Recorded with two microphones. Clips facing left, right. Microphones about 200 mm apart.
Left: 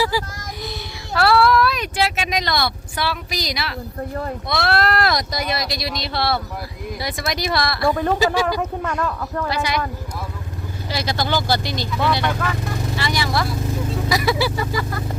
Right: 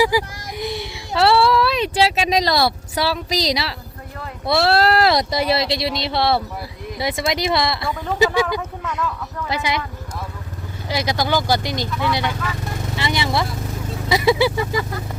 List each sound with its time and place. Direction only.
0.0 s child singing: 15° right (ahead or behind); by 3.8 s 35° right (ahead or behind)
4.4 s speech: 30° right (ahead or behind)
7.9 s speech: 60° left (ahead or behind)
9.5 s speech: 20° right (ahead or behind)
10.8 s speech: 15° right (ahead or behind)